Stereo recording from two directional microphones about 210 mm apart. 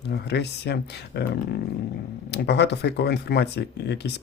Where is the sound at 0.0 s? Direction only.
50° left (ahead or behind).